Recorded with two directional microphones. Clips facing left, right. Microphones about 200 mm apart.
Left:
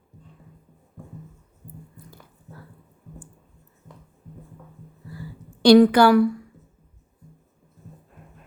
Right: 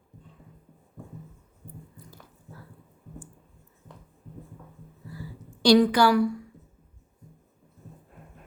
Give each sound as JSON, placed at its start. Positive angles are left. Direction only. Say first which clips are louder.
{"t": 5.6, "sound": "a woman's voice", "louder": "left 6 dB", "side_deg": 55}